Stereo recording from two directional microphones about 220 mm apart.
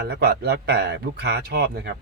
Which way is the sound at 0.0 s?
45° right (ahead or behind).